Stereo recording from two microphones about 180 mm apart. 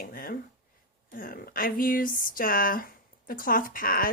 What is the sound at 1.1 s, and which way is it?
A woman's voice, 55° left (ahead or behind).